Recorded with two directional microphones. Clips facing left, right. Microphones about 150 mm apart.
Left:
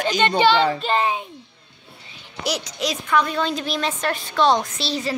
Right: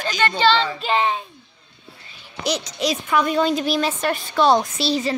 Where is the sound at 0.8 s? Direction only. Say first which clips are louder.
Even; centre (ahead or behind).